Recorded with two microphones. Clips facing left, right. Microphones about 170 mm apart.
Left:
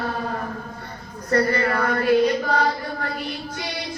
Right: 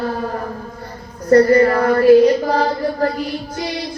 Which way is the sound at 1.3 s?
35° right (ahead or behind).